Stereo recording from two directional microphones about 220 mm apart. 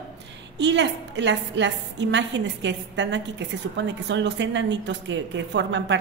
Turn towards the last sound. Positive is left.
turn(degrees=-55)  # may be behind; listen again after turning